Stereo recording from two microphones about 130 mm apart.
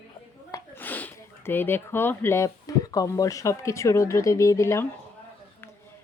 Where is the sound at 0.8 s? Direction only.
15° left (ahead or behind).